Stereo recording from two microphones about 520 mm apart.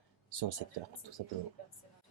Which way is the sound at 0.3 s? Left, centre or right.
Right.